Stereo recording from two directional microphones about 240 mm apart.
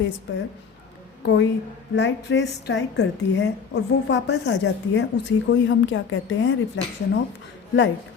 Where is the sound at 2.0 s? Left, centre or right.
Left.